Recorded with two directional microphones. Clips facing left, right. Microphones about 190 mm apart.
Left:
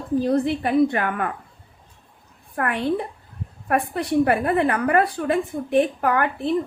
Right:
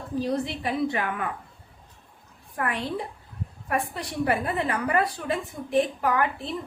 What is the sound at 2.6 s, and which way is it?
A woman's voice, 60° left (ahead or behind).